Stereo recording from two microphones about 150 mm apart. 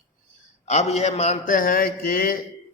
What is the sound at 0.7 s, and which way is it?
Speech, 50° left (ahead or behind).